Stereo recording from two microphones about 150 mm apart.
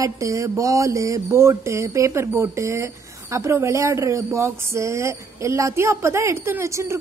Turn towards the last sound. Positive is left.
turn(degrees=-20)  # may be behind; listen again after turning